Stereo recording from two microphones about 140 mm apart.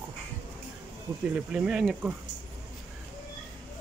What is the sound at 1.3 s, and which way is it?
Speech, 10° right (ahead or behind).